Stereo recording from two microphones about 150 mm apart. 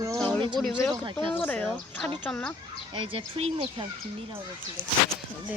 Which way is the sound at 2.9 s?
35° right (ahead or behind).